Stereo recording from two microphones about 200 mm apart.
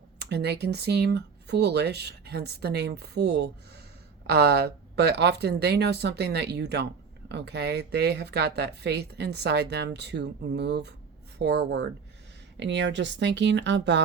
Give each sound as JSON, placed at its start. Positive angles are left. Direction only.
{"t": 0.2, "sound": "speech", "side_deg": -55}